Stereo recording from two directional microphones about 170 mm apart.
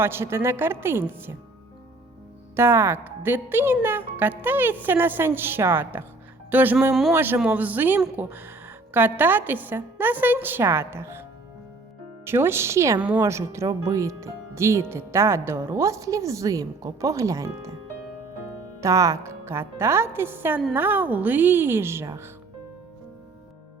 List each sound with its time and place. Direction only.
0.0 s a woman's voice: 15° right (ahead or behind)
2.6 s a woman's voice: 15° right (ahead or behind)
18.8 s a woman's voice: 20° right (ahead or behind)